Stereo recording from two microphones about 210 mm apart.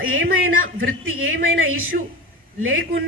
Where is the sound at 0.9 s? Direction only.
70° right (ahead or behind).